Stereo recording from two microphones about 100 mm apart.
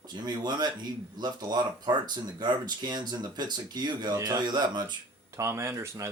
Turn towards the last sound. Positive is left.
turn(degrees=-30)  # may be behind; listen again after turning